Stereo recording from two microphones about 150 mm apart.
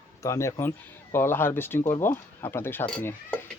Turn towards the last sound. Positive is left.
turn(degrees=5)  # may be behind; listen again after turning